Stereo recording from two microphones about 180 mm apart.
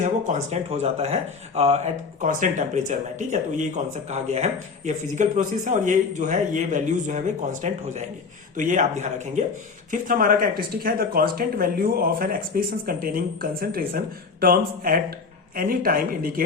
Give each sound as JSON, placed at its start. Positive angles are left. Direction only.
{"t": 0.0, "sound": "a man's voice", "side_deg": -40}